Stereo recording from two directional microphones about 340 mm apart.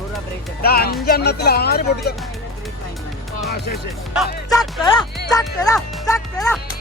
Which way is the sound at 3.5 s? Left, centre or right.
Left.